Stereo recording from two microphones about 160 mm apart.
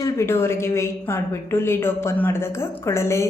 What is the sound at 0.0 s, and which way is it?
A woman's voice, 15° left (ahead or behind).